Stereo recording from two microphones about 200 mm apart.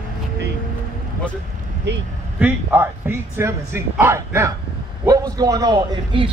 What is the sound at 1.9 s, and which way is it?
Speech, 60° right (ahead or behind).